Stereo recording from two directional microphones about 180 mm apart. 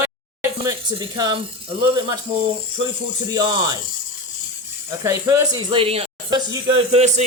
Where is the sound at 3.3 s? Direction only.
25° right (ahead or behind).